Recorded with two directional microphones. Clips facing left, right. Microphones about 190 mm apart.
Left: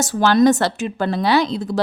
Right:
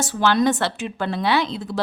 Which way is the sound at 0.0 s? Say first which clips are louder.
Left 5 dB; 40° left (ahead or behind).